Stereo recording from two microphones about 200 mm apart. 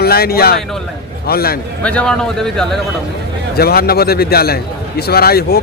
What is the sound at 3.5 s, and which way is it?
Speech, 50° left (ahead or behind).